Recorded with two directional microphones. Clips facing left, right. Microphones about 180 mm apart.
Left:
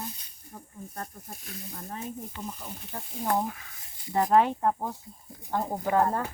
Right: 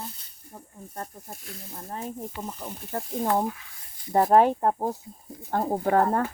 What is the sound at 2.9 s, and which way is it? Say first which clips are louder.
Speech: right 3 dB; 65° right (ahead or behind).